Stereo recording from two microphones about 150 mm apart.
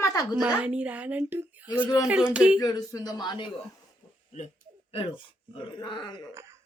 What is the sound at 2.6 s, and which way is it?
Speech, 25° left (ahead or behind).